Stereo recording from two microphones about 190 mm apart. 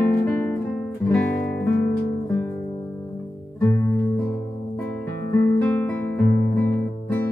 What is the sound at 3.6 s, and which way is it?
Music, 15° left (ahead or behind).